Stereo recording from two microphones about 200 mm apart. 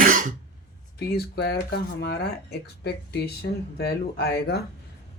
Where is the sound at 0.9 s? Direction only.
55° left (ahead or behind).